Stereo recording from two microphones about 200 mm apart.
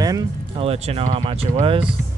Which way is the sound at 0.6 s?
30° right (ahead or behind).